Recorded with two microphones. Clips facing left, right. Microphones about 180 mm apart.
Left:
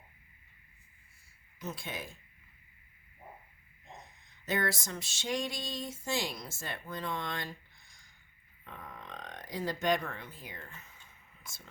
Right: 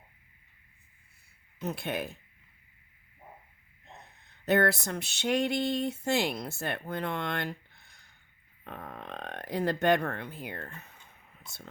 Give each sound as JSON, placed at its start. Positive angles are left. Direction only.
{"t": 1.6, "sound": "speech", "side_deg": -60}
{"t": 3.9, "sound": "a sound", "side_deg": -65}
{"t": 8.6, "sound": "speech", "side_deg": -60}